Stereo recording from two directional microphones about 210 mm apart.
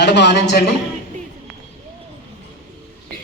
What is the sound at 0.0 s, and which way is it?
Speech, 55° left (ahead or behind).